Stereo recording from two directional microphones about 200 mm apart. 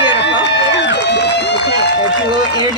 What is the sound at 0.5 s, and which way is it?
Speech, 60° left (ahead or behind).